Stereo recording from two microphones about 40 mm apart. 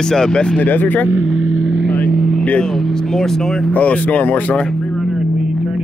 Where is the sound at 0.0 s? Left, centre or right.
Centre.